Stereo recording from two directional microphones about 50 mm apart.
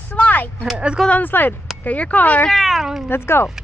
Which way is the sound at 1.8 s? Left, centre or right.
Left.